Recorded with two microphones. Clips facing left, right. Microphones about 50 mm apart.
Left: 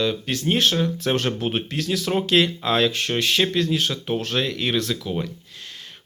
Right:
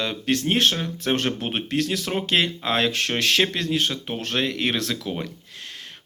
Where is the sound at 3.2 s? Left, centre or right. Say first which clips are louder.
Even; right.